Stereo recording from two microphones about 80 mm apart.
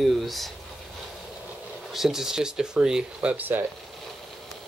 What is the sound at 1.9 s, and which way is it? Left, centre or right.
Speech, centre.